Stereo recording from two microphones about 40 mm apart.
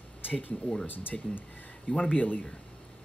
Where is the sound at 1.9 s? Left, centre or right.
Left.